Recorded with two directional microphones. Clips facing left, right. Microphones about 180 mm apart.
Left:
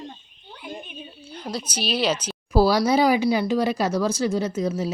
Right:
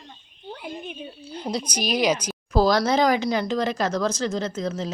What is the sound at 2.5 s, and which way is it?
Speech, 10° left (ahead or behind).